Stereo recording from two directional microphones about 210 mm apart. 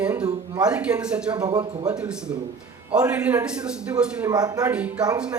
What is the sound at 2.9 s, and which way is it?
A man's voice, 5° right (ahead or behind).